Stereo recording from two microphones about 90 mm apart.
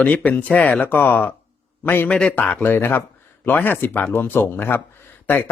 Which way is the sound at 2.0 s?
10° left (ahead or behind).